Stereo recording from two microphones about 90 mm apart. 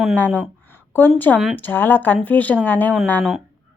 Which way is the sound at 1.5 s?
20° left (ahead or behind).